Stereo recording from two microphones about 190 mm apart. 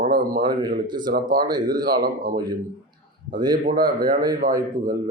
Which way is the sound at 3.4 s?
20° right (ahead or behind).